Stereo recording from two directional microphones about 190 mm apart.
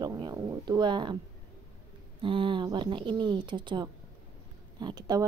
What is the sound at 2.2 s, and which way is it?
Speech, 25° right (ahead or behind).